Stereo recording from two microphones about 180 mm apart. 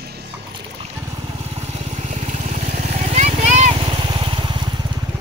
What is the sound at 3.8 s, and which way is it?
Vehicle, 25° right (ahead or behind).